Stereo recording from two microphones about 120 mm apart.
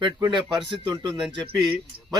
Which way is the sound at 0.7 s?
40° right (ahead or behind).